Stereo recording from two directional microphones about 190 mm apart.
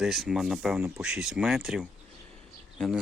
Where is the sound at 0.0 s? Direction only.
Centre (ahead or behind).